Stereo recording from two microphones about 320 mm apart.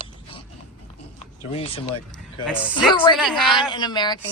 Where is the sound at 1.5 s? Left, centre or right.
Centre.